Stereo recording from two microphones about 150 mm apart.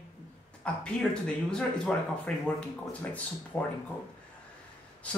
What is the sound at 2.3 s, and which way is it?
Speech, 10° left (ahead or behind).